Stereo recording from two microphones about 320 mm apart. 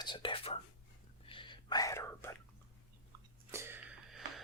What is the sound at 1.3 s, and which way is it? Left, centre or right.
Whispering, centre.